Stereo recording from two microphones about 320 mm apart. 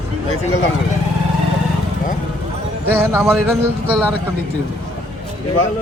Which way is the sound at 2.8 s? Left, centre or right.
Centre.